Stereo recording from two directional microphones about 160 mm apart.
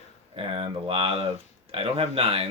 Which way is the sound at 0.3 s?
35° right (ahead or behind).